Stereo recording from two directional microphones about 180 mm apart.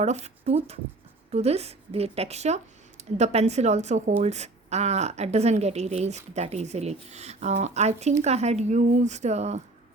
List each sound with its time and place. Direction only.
0.0 s a woman's voice: 40° right (ahead or behind)